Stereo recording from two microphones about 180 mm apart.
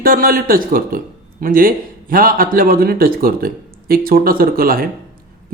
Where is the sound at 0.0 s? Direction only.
50° right (ahead or behind).